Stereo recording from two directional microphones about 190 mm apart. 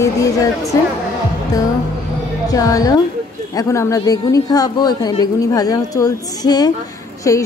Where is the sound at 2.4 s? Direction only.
20° left (ahead or behind).